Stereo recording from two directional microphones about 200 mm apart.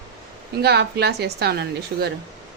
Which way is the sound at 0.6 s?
55° right (ahead or behind).